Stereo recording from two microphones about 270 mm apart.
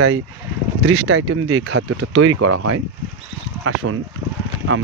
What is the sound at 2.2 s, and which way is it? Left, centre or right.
Speech, right.